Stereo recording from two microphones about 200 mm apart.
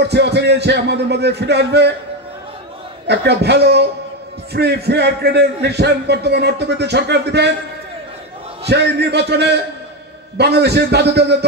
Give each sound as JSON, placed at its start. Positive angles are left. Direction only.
{"t": 0.1, "sound": "a man's voice", "side_deg": -55}
{"t": 3.1, "sound": "a man's voice", "side_deg": -55}
{"t": 8.6, "sound": "a man's voice", "side_deg": -55}